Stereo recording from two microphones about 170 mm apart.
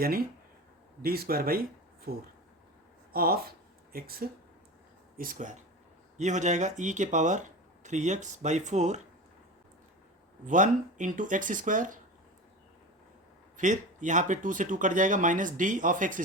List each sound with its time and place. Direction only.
1.0 s speech: 65° right (ahead or behind); by 9.0 s 45° right (ahead or behind)
10.4 s speech: 50° right (ahead or behind)
13.6 s speech: 45° right (ahead or behind)